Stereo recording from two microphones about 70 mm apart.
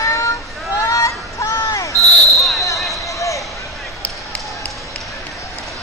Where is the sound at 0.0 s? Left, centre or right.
Left.